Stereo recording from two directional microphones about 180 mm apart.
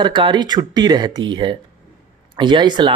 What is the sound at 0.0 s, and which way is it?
Speech, 25° right (ahead or behind).